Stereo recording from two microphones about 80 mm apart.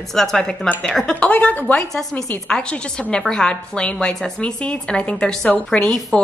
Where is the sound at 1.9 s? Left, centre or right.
Centre.